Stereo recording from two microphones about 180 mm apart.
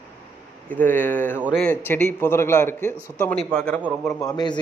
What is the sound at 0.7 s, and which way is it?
A man's voice, 10° left (ahead or behind).